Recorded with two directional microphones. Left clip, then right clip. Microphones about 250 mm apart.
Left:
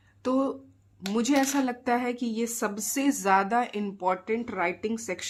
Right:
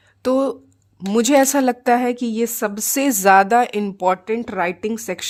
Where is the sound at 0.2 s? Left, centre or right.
Right.